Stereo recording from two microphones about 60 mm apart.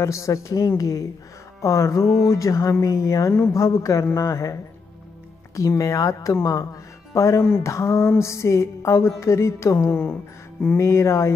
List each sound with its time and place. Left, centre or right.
0.0 s a woman's voice: left
1.6 s a woman's voice: left
5.6 s speech: left
6.4 s speech: left
7.6 s a woman's voice: left
8.2 s music: left
9.8 s speech: left
10.8 s music: left